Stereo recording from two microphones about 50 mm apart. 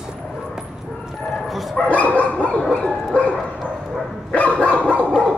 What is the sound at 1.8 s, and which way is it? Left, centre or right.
Bow-wow, left.